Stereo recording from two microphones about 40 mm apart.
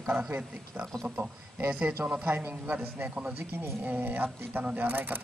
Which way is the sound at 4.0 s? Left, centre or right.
Right.